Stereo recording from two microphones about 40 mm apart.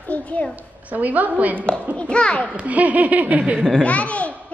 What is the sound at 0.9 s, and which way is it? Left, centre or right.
Speech, right.